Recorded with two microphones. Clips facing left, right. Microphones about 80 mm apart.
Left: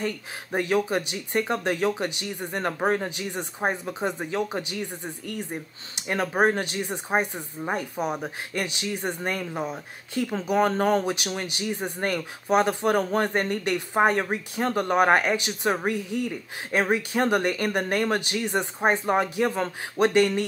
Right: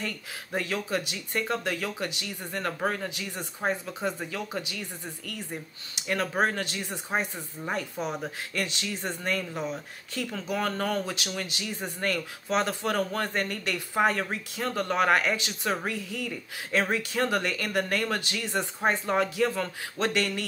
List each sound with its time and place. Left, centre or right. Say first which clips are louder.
0.0 s speech: left 5 dB; left